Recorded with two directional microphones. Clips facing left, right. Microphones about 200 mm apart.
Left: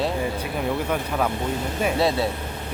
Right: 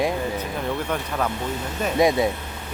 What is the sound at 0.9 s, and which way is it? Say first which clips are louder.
Speech: left 2 dB; 5° left (ahead or behind).